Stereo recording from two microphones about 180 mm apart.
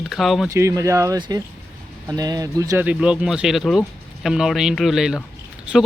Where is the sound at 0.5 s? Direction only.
15° right (ahead or behind).